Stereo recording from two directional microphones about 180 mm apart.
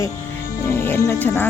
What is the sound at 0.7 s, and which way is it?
Music, 15° left (ahead or behind).